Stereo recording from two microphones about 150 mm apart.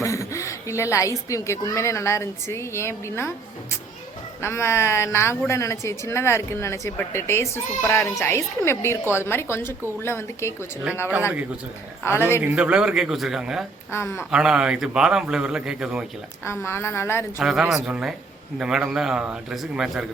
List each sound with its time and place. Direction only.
0.0 s speech: 20° left (ahead or behind)
4.4 s speech: 15° left (ahead or behind)
12.0 s speech: 15° left (ahead or behind)
12.4 s a man's voice: 5° right (ahead or behind)
13.9 s speech: 15° left (ahead or behind)
14.3 s a man's voice: 5° right (ahead or behind)
16.4 s speech: 15° left (ahead or behind)
17.4 s a man's voice: 5° right (ahead or behind)